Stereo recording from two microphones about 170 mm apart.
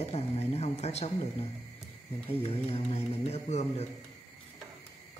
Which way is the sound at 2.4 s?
35° left (ahead or behind).